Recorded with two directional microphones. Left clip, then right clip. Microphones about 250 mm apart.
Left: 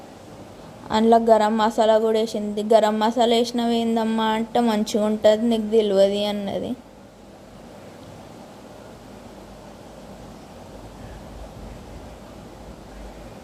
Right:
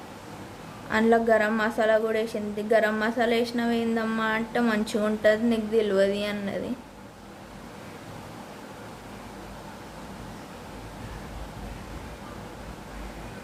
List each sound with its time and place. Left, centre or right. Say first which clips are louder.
0.9 s a woman's voice: left 5 dB; centre